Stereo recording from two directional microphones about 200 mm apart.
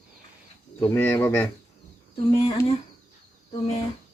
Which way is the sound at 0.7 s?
15° left (ahead or behind).